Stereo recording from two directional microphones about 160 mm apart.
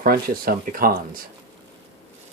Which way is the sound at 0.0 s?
70° right (ahead or behind).